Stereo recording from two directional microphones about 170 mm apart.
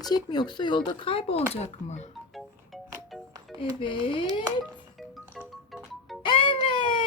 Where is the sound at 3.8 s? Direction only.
30° left (ahead or behind).